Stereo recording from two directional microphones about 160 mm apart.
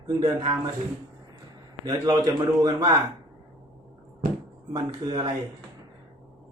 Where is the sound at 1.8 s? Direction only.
25° right (ahead or behind).